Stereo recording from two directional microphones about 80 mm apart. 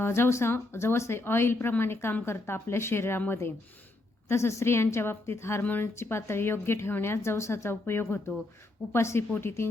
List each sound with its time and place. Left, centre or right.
0.0 s a woman's voice: left